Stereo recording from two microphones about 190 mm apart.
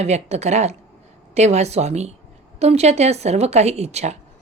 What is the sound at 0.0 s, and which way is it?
A woman's voice, 35° right (ahead or behind).